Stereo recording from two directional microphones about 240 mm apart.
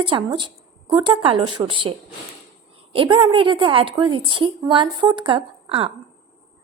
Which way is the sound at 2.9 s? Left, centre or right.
Right.